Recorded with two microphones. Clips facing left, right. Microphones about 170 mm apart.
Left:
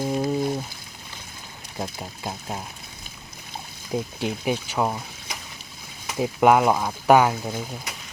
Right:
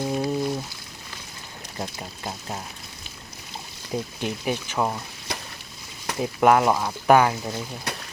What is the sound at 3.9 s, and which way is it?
Speech, 10° left (ahead or behind).